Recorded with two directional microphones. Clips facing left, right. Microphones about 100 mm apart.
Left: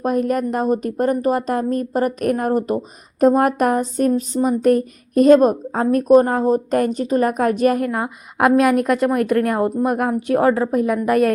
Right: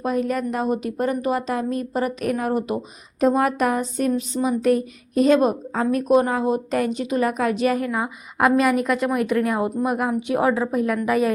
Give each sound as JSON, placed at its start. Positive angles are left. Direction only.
{"t": 0.0, "sound": "speech", "side_deg": 50}
{"t": 7.9, "sound": "a woman's voice", "side_deg": 0}
{"t": 8.4, "sound": "speech", "side_deg": 55}
{"t": 10.6, "sound": "a woman's voice", "side_deg": 5}